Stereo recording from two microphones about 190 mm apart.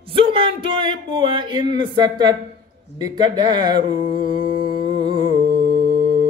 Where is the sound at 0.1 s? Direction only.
25° right (ahead or behind).